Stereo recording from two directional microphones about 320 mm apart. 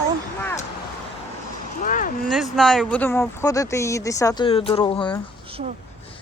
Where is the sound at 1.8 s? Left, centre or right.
Left.